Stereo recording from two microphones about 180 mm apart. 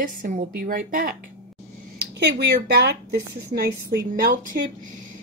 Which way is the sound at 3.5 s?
55° right (ahead or behind).